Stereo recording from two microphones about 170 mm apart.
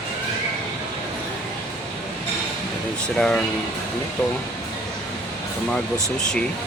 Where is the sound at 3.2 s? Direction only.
5° left (ahead or behind).